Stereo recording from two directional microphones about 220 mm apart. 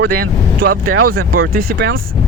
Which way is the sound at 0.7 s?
85° right.